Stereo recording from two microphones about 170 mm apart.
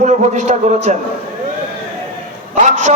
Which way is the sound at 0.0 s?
45° right (ahead or behind).